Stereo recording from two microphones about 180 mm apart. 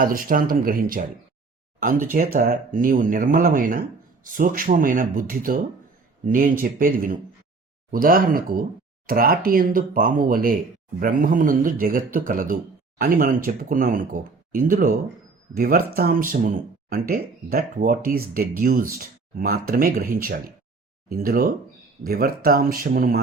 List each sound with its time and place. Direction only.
0.0 s speech: 50° right (ahead or behind)
2.3 s speech: 55° right (ahead or behind)